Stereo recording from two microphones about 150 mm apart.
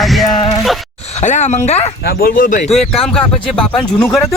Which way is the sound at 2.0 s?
90° left.